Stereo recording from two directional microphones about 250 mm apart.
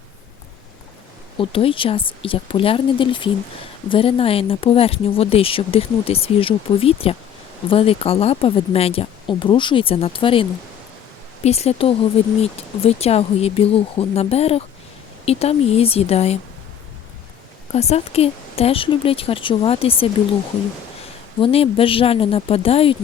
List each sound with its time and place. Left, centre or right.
1.4 s speech: left
11.4 s speech: left
17.7 s speech: left
21.4 s speech: left